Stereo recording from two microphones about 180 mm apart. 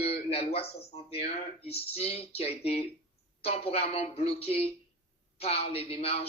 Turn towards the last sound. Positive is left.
turn(degrees=35)  # may be behind; listen again after turning